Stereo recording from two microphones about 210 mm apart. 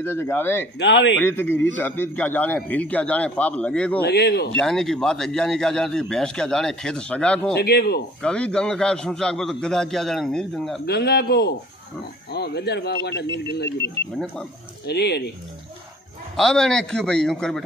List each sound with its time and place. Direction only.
0.0 s a man's voice: 10° left (ahead or behind)
0.7 s speech: 60° left (ahead or behind)
1.2 s a man's voice: 10° left (ahead or behind)
4.0 s speech: 50° left (ahead or behind)
4.6 s speech: centre (ahead or behind)
7.5 s speech: 50° left (ahead or behind)
8.2 s speech: 5° left (ahead or behind)
10.9 s speech: 50° left (ahead or behind)
14.1 s speech: centre (ahead or behind)
14.9 s speech: 50° left (ahead or behind)
16.3 s speech: centre (ahead or behind)